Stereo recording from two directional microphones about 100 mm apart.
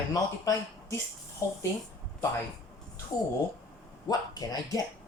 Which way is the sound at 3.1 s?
40° left (ahead or behind).